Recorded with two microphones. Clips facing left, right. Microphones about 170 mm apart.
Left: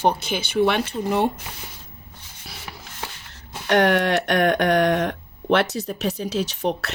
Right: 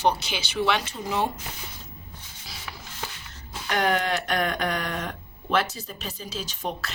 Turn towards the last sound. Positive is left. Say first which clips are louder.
# left 7 dB
turn(degrees=70)  # may be behind; listen again after turning